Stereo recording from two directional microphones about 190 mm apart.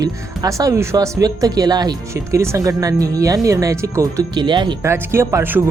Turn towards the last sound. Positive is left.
turn(degrees=-15)  # may be behind; listen again after turning